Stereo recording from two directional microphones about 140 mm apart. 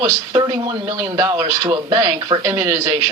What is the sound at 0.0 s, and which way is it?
A woman's voice, 25° right (ahead or behind).